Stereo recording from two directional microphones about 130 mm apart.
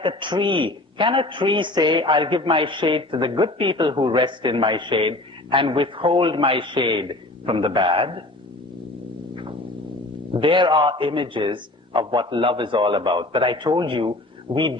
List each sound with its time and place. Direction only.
0.0 s a man's voice: 40° right (ahead or behind)
9.3 s cat: 40° right (ahead or behind)
10.3 s a man's voice: 40° right (ahead or behind)